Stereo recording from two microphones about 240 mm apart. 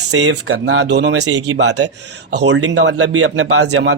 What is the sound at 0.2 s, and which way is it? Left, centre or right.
Speech, right.